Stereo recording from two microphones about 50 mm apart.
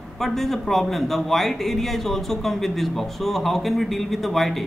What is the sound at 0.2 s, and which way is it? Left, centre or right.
A man's voice, centre.